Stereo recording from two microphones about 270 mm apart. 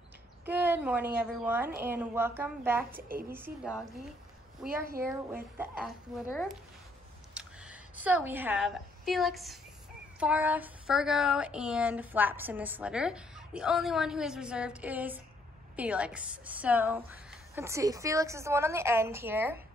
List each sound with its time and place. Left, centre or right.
0.5 s a woman's voice: centre
3.0 s a woman's voice: right
3.3 s a woman's voice: centre
4.6 s a woman's voice: right
5.3 s a woman's voice: centre